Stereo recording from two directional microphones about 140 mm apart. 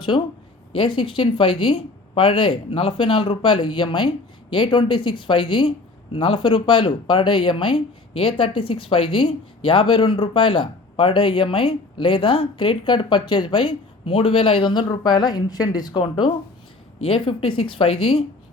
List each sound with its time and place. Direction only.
0.8 s speech: 35° left (ahead or behind)